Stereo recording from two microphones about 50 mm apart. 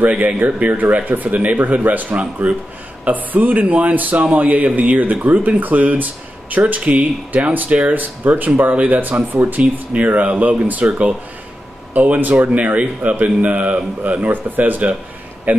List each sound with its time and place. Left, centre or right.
0.0 s speech: right
14.2 s speech: right